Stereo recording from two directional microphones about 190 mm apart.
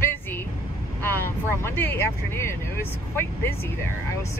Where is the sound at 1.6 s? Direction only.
10° left (ahead or behind).